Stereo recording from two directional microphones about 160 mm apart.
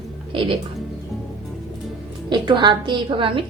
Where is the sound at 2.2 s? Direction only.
30° right (ahead or behind).